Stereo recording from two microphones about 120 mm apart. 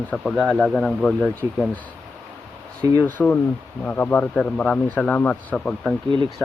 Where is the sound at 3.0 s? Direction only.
15° left (ahead or behind).